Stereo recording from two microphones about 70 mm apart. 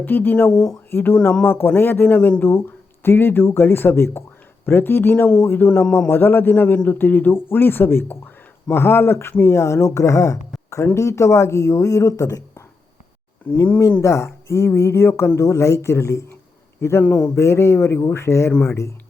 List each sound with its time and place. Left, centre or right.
0.0 s a man's voice: left
0.5 s speech: centre
0.9 s a man's voice: left
9.6 s speech: left
14.0 s speech: left
17.0 s a man's voice: left
17.3 s speech: left